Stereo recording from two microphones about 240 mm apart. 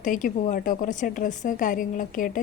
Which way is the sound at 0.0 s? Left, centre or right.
Left.